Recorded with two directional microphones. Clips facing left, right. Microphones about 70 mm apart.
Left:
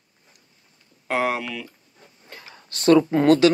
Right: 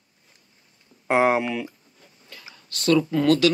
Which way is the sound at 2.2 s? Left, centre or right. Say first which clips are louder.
Left 2 dB; left.